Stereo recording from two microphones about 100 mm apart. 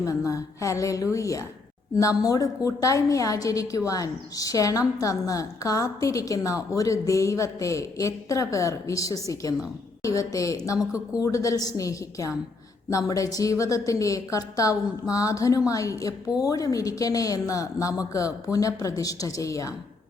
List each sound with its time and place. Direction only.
0.0 s a woman's voice: 35° left (ahead or behind)